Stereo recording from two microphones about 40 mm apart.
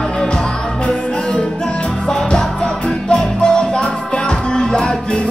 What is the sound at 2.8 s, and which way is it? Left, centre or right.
Music, left.